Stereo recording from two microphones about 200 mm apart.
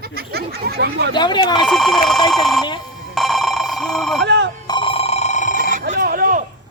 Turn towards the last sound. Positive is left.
turn(degrees=-45)  # may be behind; listen again after turning